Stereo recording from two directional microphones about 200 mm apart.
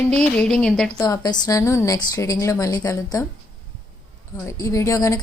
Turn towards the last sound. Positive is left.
turn(degrees=15)  # may be behind; listen again after turning